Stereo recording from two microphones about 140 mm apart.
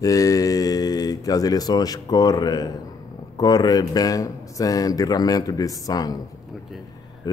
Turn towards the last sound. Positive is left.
turn(degrees=25)  # may be behind; listen again after turning